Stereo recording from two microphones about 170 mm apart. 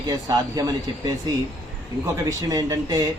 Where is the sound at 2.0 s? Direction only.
20° right (ahead or behind).